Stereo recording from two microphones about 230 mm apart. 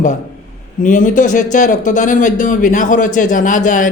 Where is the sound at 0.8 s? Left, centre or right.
Left.